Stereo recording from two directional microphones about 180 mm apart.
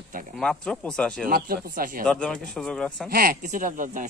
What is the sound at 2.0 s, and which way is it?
Speech, 5° left (ahead or behind).